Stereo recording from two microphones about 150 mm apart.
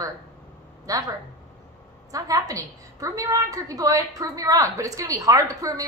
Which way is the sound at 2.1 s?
25° right (ahead or behind).